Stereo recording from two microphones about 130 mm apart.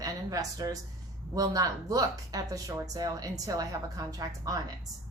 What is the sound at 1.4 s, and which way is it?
A woman's voice, 30° right (ahead or behind).